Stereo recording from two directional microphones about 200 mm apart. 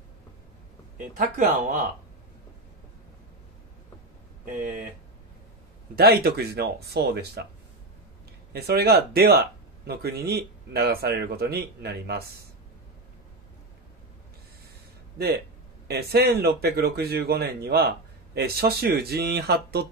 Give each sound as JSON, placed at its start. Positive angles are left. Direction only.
{"t": 1.6, "sound": "speech", "side_deg": -40}
{"t": 4.5, "sound": "speech", "side_deg": -40}
{"t": 5.9, "sound": "speech", "side_deg": -50}
{"t": 8.5, "sound": "speech", "side_deg": -50}
{"t": 15.9, "sound": "speech", "side_deg": -50}